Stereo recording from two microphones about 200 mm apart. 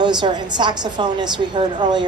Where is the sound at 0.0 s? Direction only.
20° right (ahead or behind).